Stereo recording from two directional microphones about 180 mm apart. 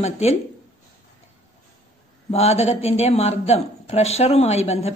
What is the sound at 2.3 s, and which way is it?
Speech, 35° left (ahead or behind).